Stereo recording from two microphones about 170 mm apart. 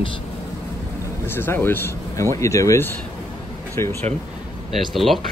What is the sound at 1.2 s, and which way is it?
Speech, 15° left (ahead or behind).